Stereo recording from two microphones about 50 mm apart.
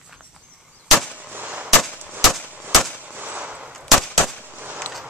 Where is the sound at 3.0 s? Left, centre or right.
Right.